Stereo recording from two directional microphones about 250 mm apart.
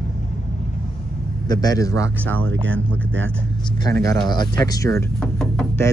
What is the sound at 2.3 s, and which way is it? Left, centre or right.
Speech, right.